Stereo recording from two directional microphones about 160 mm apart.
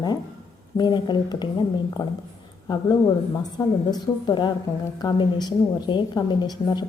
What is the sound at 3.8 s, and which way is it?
A woman's voice, 25° left (ahead or behind).